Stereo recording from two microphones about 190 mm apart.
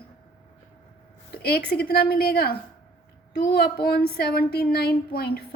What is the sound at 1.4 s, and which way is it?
A woman's voice, 55° left (ahead or behind).